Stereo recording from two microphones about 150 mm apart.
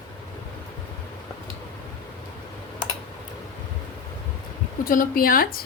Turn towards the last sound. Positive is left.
turn(degrees=75)  # may be behind; listen again after turning